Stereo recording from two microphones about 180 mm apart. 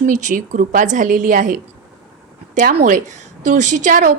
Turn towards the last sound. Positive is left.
turn(degrees=-45)  # may be behind; listen again after turning